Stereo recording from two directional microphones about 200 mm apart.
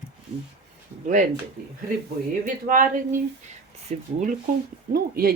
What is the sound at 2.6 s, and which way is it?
Speech, 45° right (ahead or behind).